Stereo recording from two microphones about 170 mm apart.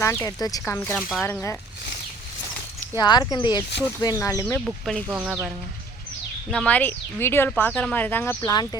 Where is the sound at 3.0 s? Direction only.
25° left (ahead or behind).